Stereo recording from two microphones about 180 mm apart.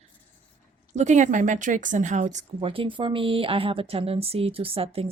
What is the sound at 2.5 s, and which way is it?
A woman's voice, 30° right (ahead or behind).